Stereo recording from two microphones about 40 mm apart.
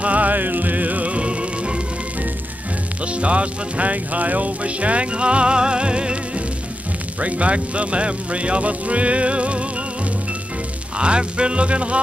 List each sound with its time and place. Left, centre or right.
0.0 s music: right
3.1 s music: right
11.0 s music: right